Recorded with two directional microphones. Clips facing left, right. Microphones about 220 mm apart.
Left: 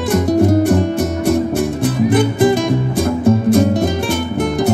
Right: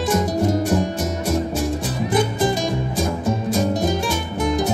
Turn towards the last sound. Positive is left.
turn(degrees=60)  # may be behind; listen again after turning